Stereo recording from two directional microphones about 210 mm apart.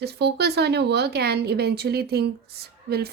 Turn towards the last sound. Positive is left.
turn(degrees=-50)  # may be behind; listen again after turning